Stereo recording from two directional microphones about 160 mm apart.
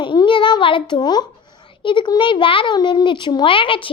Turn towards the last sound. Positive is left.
turn(degrees=30)  # may be behind; listen again after turning